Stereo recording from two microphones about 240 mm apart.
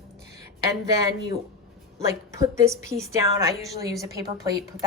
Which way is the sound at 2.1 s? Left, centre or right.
Centre.